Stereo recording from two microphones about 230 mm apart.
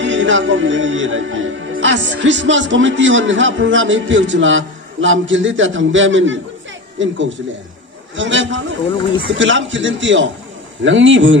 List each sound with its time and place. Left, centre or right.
0.0 s a man's voice: right